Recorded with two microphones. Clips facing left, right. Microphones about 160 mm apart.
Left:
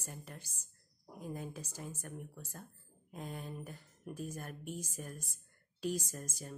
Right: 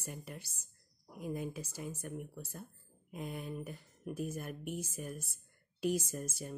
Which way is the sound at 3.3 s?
35° left (ahead or behind).